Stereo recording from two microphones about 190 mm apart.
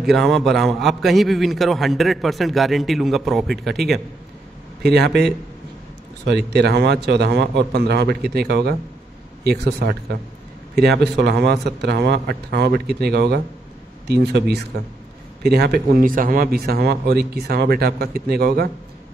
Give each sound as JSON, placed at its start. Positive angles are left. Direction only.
{"t": 0.0, "sound": "a man's voice", "side_deg": 0}
{"t": 4.8, "sound": "speech", "side_deg": -60}